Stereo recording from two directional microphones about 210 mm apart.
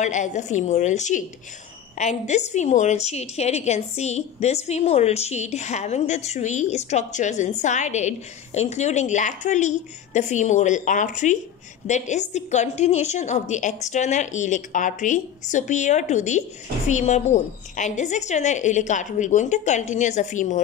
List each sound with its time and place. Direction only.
0.0 s a woman's voice: 35° left (ahead or behind)